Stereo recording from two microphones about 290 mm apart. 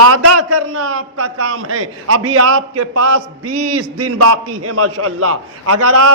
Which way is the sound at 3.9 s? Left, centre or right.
Right.